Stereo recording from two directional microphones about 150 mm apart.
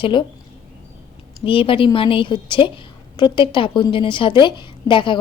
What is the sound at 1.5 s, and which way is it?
A woman's voice, 35° left (ahead or behind).